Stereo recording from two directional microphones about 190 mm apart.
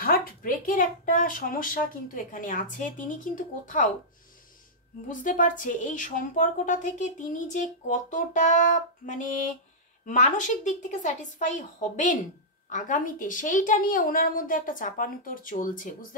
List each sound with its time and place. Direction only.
0.0 s a woman's voice: 50° left (ahead or behind)
5.0 s a woman's voice: 45° left (ahead or behind)